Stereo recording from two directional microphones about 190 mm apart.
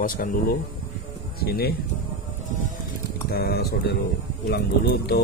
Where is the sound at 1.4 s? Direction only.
55° left (ahead or behind).